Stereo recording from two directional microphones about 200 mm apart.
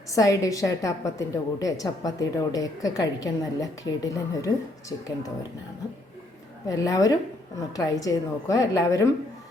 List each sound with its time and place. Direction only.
0.1 s a woman's voice: 15° left (ahead or behind)
6.7 s a woman's voice: 15° left (ahead or behind)